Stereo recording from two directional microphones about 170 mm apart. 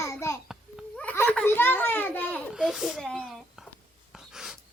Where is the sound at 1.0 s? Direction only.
10° left (ahead or behind).